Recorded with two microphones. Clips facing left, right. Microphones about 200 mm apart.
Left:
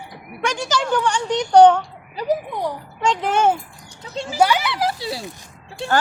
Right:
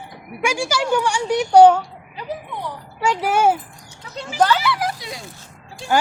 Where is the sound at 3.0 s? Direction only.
10° right (ahead or behind).